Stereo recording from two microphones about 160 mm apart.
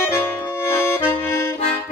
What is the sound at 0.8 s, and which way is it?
Music, 15° left (ahead or behind).